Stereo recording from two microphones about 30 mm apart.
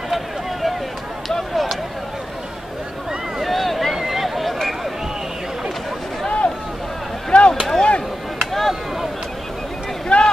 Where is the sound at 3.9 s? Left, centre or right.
Centre.